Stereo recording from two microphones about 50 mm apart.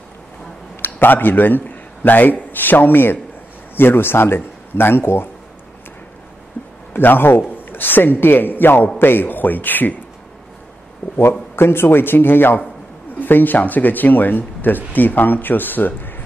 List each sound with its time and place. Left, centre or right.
0.8 s a man's voice: left
6.9 s a man's voice: left
11.1 s a man's voice: left